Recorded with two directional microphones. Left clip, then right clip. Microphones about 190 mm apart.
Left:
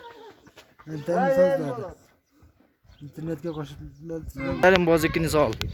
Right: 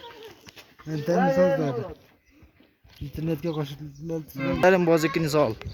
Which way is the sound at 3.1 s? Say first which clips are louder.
Right 3 dB; 40° right (ahead or behind).